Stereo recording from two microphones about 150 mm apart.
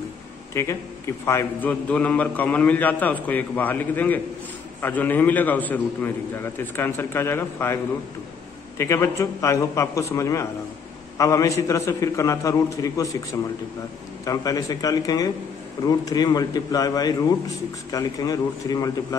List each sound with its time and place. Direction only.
0.6 s a man's voice: 20° left (ahead or behind)
14.2 s a man's voice: 25° left (ahead or behind)